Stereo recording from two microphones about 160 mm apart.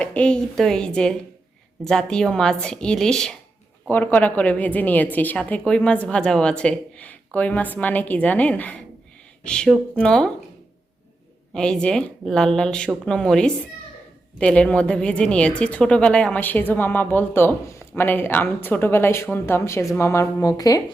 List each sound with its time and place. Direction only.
0.0 s speech: 5° left (ahead or behind)
11.5 s speech: 5° left (ahead or behind); by 20.8 s 20° left (ahead or behind)